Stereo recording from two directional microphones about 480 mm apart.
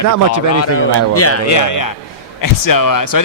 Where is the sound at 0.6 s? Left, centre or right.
Left.